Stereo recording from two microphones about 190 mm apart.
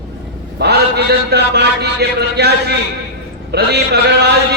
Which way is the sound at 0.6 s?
60° right (ahead or behind).